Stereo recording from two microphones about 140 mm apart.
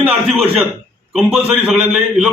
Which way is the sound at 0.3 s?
Centre (ahead or behind).